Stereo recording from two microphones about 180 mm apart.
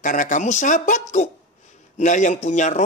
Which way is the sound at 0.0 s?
45° left (ahead or behind).